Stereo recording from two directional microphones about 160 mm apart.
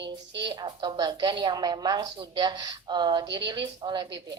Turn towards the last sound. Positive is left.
turn(degrees=-25)  # may be behind; listen again after turning